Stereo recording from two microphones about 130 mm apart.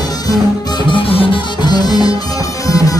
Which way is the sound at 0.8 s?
45° left (ahead or behind).